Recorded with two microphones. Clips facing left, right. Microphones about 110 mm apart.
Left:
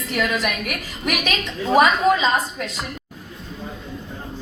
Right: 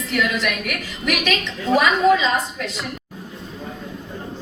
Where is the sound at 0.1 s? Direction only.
45° left (ahead or behind).